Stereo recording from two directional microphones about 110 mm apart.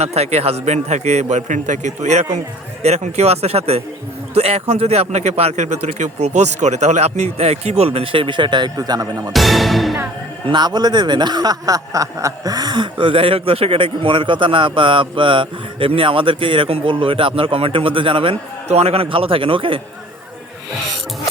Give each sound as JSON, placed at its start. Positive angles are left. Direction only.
{"t": 0.0, "sound": "a man's voice", "side_deg": -75}
{"t": 9.3, "sound": "speech", "side_deg": 0}
{"t": 10.5, "sound": "speech", "side_deg": -40}